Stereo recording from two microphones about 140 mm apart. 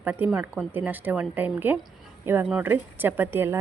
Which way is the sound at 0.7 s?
15° right (ahead or behind).